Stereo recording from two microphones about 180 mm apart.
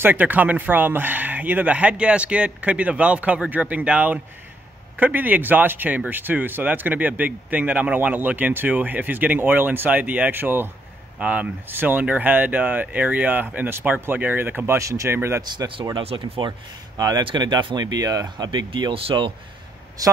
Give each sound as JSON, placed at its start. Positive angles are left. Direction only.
{"t": 0.0, "sound": "speech", "side_deg": -10}